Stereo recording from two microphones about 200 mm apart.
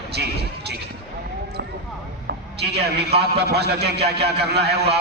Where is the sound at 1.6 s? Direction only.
55° right (ahead or behind).